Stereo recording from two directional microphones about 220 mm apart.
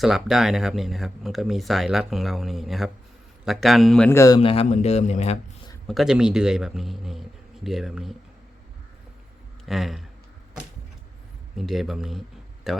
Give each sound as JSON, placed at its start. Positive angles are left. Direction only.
{"t": 0.0, "sound": "speech", "side_deg": 0}
{"t": 4.4, "sound": "a man's voice", "side_deg": 25}
{"t": 5.9, "sound": "speech", "side_deg": 0}
{"t": 9.6, "sound": "speech", "side_deg": 0}
{"t": 11.5, "sound": "speech", "side_deg": 0}